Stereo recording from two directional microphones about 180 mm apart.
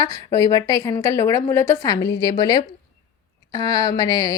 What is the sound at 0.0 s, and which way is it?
A woman's voice, 20° left (ahead or behind).